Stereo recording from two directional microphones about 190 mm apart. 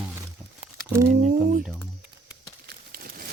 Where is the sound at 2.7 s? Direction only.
50° right (ahead or behind).